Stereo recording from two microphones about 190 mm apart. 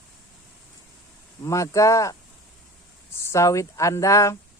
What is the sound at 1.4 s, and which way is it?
Speech, 15° left (ahead or behind).